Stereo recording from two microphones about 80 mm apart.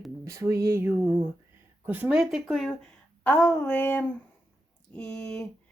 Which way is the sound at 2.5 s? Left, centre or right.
Centre.